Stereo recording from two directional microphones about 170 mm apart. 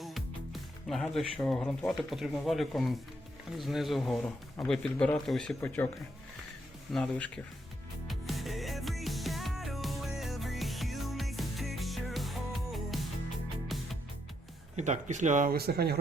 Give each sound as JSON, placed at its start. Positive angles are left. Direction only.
{"t": 0.0, "sound": "a man's voice", "side_deg": 0}
{"t": 6.9, "sound": "a man's voice", "side_deg": 5}
{"t": 8.0, "sound": "music", "side_deg": 0}
{"t": 14.8, "sound": "speech", "side_deg": -45}